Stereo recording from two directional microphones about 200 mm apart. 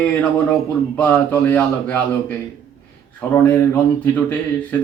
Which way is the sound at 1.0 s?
10° left (ahead or behind).